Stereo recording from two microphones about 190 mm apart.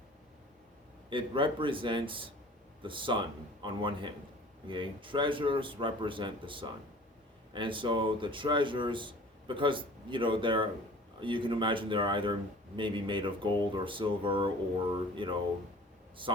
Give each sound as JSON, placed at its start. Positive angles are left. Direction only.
{"t": 1.1, "sound": "speech", "side_deg": -25}